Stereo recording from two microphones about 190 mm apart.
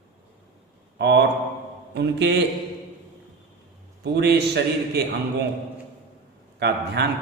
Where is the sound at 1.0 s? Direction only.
65° right (ahead or behind).